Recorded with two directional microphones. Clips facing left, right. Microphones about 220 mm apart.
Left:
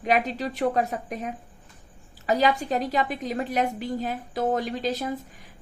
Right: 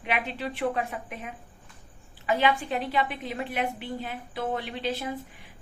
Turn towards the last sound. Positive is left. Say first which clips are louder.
# left 4 dB
turn(degrees=40)  # may be behind; listen again after turning